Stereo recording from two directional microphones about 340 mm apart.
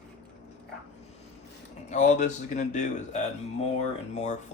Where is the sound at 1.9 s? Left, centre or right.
Left.